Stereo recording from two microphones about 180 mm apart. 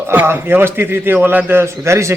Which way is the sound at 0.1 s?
10° right (ahead or behind).